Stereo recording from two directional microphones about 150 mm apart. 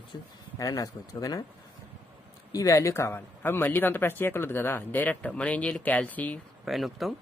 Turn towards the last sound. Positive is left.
turn(degrees=0)  # may be behind; listen again after turning